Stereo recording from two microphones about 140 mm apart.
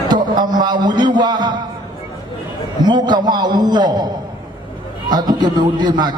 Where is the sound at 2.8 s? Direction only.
30° right (ahead or behind).